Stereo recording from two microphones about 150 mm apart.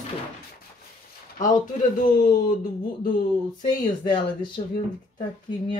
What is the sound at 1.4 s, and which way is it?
Speech, 60° left (ahead or behind).